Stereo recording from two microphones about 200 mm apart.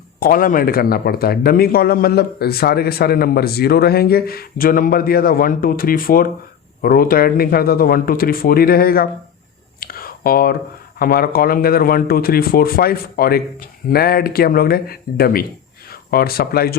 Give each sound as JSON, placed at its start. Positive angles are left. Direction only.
{"t": 0.2, "sound": "speech", "side_deg": 45}
{"t": 9.8, "sound": "a sound", "side_deg": 45}
{"t": 11.0, "sound": "speech", "side_deg": 50}